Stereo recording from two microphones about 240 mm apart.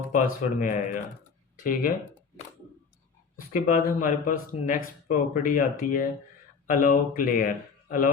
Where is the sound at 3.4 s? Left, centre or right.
Left.